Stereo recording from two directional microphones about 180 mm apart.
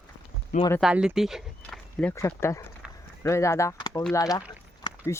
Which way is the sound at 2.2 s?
15° left (ahead or behind).